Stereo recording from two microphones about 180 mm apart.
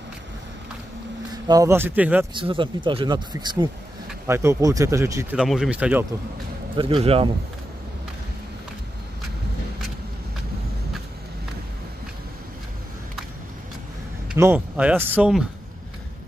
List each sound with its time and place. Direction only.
1.3 s speech: 20° right (ahead or behind)
2.3 s speech: 30° right (ahead or behind); by 6.0 s 5° right (ahead or behind)
6.8 s speech: 30° right (ahead or behind)
14.4 s speech: 10° right (ahead or behind)